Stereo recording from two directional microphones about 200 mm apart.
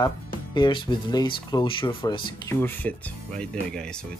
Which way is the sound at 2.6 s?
5° left (ahead or behind).